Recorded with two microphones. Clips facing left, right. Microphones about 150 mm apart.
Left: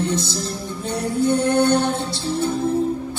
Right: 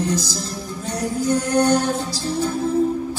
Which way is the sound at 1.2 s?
25° left (ahead or behind).